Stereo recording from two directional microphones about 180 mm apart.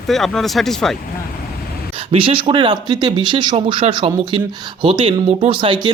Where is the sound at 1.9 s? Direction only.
30° right (ahead or behind).